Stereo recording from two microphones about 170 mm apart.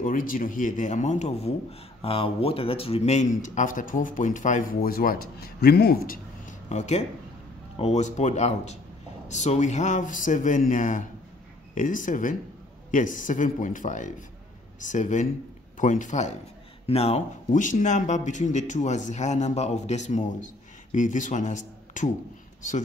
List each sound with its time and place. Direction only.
0.0 s a man's voice: 55° left (ahead or behind); by 17.2 s 35° left (ahead or behind)
17.5 s a man's voice: 50° left (ahead or behind)